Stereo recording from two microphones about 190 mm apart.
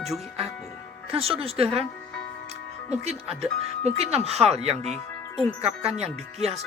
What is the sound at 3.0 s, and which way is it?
Speech, 35° right (ahead or behind).